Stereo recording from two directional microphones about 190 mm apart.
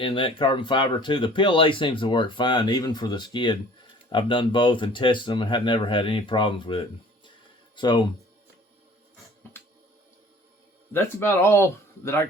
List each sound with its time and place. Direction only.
0.0 s speech: 25° left (ahead or behind)
10.9 s speech: 10° left (ahead or behind)